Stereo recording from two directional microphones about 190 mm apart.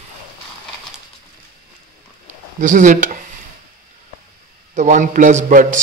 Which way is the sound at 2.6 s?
40° right (ahead or behind).